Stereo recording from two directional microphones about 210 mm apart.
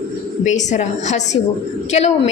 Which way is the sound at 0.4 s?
35° left (ahead or behind).